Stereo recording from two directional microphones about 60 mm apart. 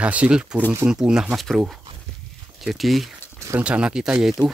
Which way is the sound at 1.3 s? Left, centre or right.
Centre.